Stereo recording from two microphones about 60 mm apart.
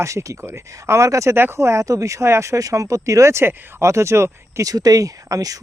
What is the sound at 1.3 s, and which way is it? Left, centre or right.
Speech, right.